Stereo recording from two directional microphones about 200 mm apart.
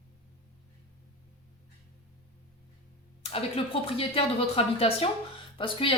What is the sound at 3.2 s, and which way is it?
Speech, 30° left (ahead or behind).